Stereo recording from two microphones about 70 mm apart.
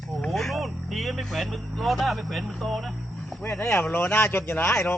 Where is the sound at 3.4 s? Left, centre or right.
Left.